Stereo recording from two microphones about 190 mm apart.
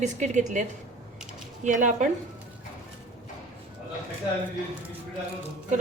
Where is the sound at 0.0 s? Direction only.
40° right (ahead or behind).